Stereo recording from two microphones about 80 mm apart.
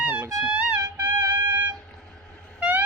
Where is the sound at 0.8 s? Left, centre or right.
Right.